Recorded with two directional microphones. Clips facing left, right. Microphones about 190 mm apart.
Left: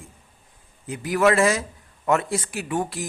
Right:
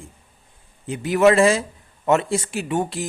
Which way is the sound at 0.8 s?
25° right (ahead or behind).